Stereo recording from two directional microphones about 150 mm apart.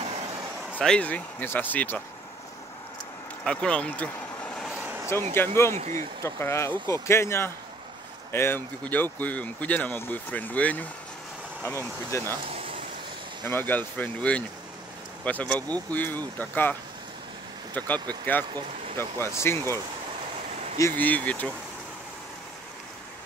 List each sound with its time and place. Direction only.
0.7 s speech: 10° left (ahead or behind)
3.4 s vehicle: 5° left (ahead or behind)
4.7 s vehicle: 10° right (ahead or behind)
5.3 s speech: 15° left (ahead or behind)
5.8 s speech: 50° right (ahead or behind)
6.2 s speech: 20° left (ahead or behind)
12.4 s a sound: 40° right (ahead or behind)
13.4 s speech: 15° left (ahead or behind)
17.7 s speech: 10° left (ahead or behind)
20.8 s speech: 10° left (ahead or behind)